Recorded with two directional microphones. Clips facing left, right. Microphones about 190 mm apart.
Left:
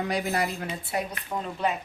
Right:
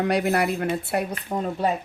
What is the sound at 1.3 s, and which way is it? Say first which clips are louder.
Speech: right 4 dB; 40° right (ahead or behind).